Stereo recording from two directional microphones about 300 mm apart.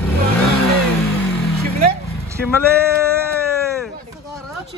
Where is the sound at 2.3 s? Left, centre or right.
Centre.